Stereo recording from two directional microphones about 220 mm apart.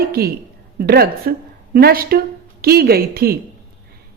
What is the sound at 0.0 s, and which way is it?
A woman's voice, 45° right (ahead or behind).